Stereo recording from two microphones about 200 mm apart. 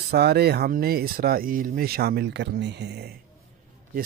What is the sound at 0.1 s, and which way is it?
A man's voice, 55° right (ahead or behind).